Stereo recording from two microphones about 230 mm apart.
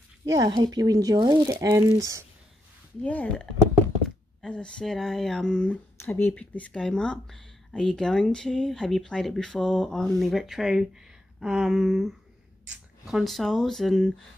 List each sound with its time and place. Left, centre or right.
0.2 s speech: centre
3.0 s speech: centre